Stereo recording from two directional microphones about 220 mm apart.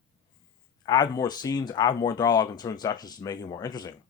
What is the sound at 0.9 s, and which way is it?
Speech, 20° left (ahead or behind).